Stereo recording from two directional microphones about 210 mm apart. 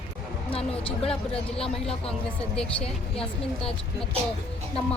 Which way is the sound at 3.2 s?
25° left (ahead or behind).